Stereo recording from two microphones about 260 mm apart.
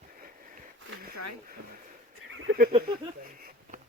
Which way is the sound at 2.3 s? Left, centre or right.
Right.